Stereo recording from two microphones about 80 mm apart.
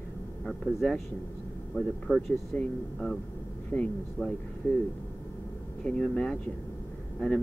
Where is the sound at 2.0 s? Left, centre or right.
Centre.